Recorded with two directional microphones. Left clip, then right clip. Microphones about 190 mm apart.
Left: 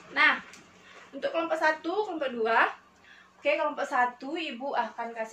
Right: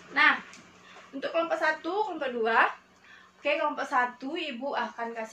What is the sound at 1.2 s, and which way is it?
A woman's voice, 15° left (ahead or behind).